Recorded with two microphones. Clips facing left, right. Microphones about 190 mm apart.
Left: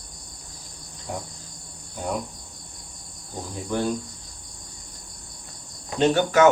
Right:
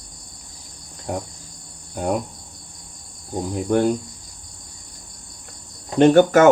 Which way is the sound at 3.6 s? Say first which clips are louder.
Right 7 dB; 55° right (ahead or behind).